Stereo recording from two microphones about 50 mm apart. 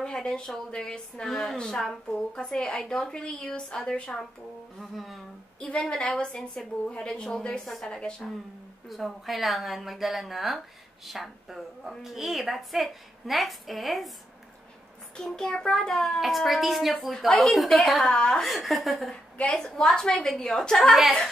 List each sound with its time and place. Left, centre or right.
0.0 s a woman's voice: centre
1.2 s a woman's voice: centre
4.7 s a woman's voice: centre
5.8 s a woman's voice: centre
7.6 s a woman's voice: centre
7.9 s a woman's voice: centre
8.8 s a woman's voice: centre
15.1 s a woman's voice: centre
18.1 s a woman's voice: centre
18.4 s a woman's voice: centre
19.3 s a woman's voice: centre
20.9 s a woman's voice: centre